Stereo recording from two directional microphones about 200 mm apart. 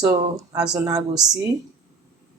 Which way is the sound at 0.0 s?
15° right (ahead or behind).